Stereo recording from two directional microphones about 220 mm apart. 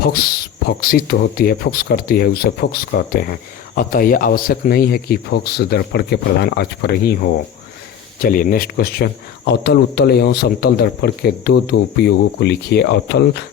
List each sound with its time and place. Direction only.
0.0 s speech: 45° left (ahead or behind)